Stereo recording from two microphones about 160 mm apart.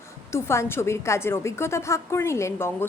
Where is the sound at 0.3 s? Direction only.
15° left (ahead or behind).